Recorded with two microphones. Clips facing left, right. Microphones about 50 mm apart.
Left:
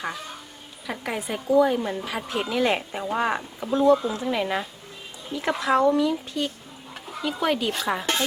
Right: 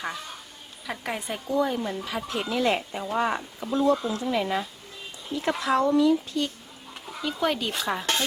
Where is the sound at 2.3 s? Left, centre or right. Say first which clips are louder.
Left 2 dB; left.